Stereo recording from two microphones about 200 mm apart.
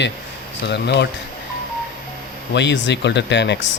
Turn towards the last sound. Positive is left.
turn(degrees=60)  # may be behind; listen again after turning